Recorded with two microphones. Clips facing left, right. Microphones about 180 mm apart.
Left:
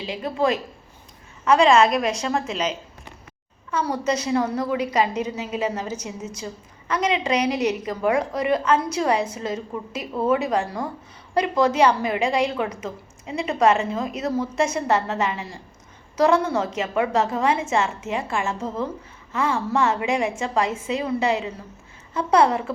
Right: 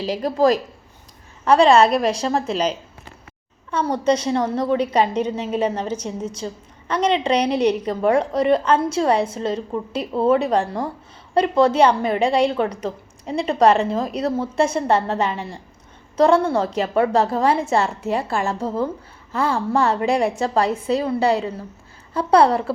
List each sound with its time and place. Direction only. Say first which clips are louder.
0.0 s a woman's voice: right 5 dB; 40° right (ahead or behind)